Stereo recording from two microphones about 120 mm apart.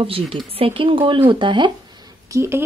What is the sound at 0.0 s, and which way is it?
Speech, 50° right (ahead or behind).